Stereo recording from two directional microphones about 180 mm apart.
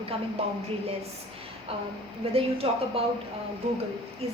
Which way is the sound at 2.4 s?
30° right (ahead or behind).